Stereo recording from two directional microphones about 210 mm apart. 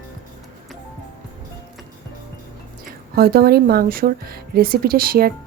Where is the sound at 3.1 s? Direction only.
45° right (ahead or behind).